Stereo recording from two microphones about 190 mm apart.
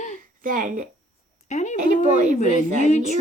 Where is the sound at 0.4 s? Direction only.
45° right (ahead or behind).